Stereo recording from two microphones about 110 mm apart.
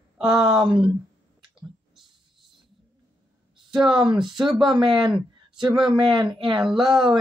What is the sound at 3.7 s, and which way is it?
Speech, 5° right (ahead or behind).